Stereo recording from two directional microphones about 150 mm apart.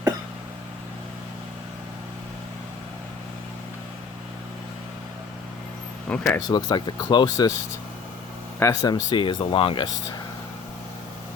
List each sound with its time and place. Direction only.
6.1 s speech: 10° left (ahead or behind)
6.5 s speech: 30° left (ahead or behind)
8.5 s speech: 20° left (ahead or behind)